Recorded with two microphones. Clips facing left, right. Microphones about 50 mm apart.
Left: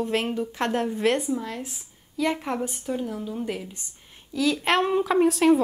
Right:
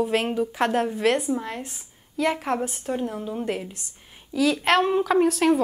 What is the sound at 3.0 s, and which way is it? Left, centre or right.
Speech, right.